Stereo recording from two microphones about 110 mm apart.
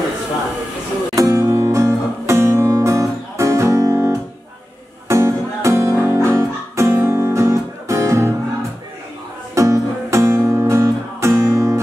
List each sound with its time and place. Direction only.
1.1 s music: 30° right (ahead or behind)
9.6 s music: 30° right (ahead or behind)